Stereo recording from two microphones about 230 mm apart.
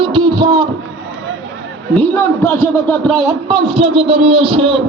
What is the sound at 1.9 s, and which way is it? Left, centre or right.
A man's voice, centre.